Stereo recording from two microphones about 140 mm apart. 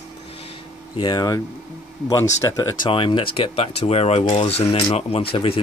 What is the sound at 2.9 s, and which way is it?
Speech, 40° left (ahead or behind).